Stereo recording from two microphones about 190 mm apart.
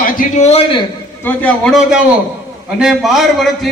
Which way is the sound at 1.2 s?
5° left (ahead or behind).